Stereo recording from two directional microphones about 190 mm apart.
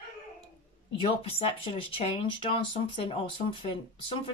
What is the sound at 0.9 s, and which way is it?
Speech, 30° left (ahead or behind).